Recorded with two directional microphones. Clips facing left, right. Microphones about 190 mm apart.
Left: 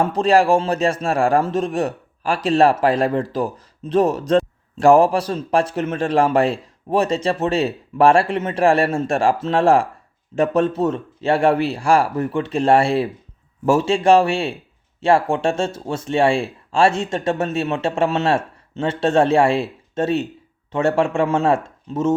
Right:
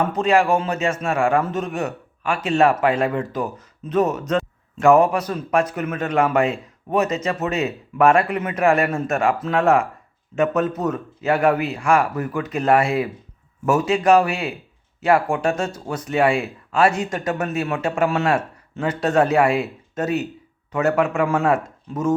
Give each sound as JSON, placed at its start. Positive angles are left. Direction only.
{"t": 0.0, "sound": "a man's voice", "side_deg": 35}